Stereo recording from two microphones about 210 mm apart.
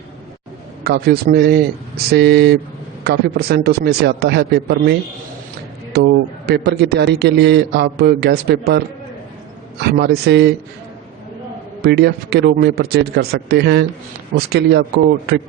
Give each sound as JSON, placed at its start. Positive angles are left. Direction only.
{"t": 0.9, "sound": "a man's voice", "side_deg": -50}
{"t": 9.8, "sound": "a man's voice", "side_deg": -50}
{"t": 11.8, "sound": "a man's voice", "side_deg": -50}